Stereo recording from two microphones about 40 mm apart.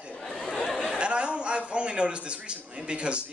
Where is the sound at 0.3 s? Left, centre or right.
Centre.